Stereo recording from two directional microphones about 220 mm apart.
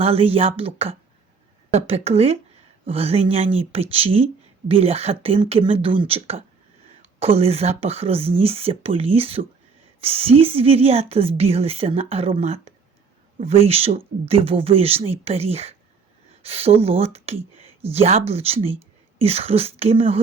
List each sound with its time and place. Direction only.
0.0 s a woman's voice: 25° right (ahead or behind)